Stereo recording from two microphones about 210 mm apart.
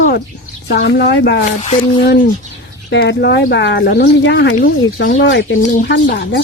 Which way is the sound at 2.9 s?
55° left (ahead or behind).